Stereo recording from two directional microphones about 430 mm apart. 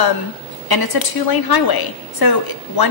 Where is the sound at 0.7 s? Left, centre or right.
Left.